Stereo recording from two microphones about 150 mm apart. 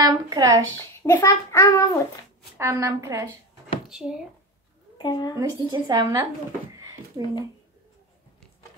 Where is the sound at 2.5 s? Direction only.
20° right (ahead or behind).